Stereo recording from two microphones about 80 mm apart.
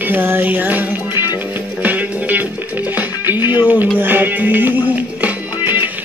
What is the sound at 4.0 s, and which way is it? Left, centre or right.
Music, right.